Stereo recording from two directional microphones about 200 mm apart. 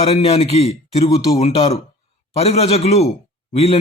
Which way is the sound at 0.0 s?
30° left (ahead or behind).